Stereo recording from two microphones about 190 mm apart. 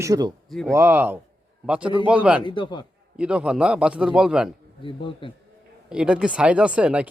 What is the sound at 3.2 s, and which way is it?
A man's voice, 5° right (ahead or behind).